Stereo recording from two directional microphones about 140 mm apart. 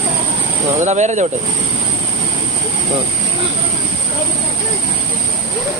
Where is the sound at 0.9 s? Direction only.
55° right (ahead or behind).